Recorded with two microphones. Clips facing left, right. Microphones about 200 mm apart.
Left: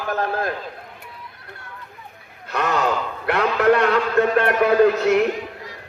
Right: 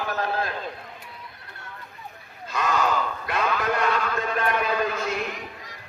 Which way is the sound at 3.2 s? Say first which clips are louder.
Left 12 dB; 65° left (ahead or behind).